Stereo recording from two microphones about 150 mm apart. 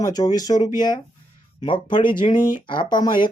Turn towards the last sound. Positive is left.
turn(degrees=30)  # may be behind; listen again after turning